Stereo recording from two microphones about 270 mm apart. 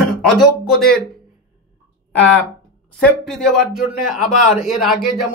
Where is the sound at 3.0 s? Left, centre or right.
Centre.